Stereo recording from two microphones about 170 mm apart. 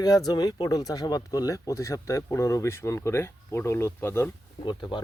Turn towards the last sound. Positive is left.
turn(degrees=25)  # may be behind; listen again after turning